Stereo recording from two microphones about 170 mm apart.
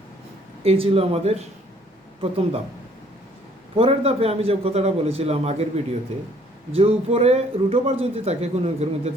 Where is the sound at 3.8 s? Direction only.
35° right (ahead or behind).